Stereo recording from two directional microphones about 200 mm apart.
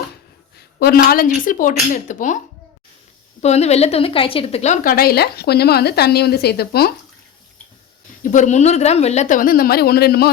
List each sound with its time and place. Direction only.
0.8 s a woman's voice: 50° left (ahead or behind)
3.4 s a woman's voice: 30° left (ahead or behind); by 6.9 s 50° left (ahead or behind)
8.2 s a woman's voice: 40° left (ahead or behind)